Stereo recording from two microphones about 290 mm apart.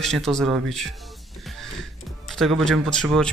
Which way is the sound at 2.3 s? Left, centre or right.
Centre.